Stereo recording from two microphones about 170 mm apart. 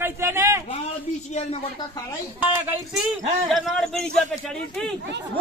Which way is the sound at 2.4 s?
10° right (ahead or behind).